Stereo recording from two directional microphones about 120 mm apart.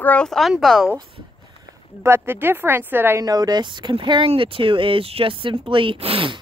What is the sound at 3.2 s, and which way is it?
Speech, 35° right (ahead or behind).